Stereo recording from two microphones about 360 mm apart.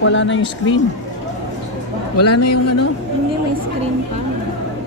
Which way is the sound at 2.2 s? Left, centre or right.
Left.